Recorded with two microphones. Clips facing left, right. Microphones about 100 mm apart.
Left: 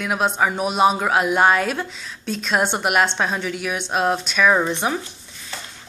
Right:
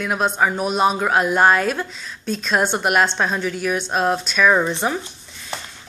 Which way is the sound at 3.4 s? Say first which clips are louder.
Right 3 dB; 40° right (ahead or behind).